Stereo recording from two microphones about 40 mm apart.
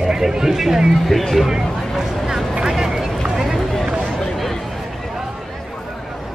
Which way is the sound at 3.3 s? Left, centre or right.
Centre.